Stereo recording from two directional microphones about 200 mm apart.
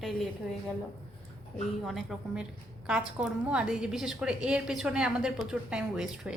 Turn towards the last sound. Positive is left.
turn(degrees=-5)  # may be behind; listen again after turning